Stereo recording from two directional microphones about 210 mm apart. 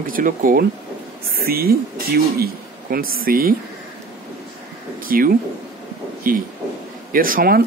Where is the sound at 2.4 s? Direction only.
45° right (ahead or behind).